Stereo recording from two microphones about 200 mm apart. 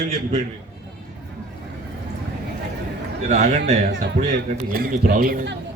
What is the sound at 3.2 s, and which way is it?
A man's voice, 35° right (ahead or behind).